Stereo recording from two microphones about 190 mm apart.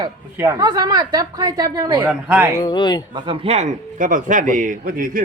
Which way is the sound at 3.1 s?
30° right (ahead or behind).